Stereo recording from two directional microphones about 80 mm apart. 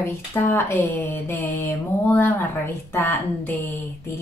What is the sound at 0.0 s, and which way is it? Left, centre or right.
Speech, left.